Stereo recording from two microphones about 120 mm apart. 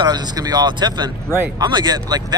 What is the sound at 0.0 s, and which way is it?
Speech, 35° right (ahead or behind).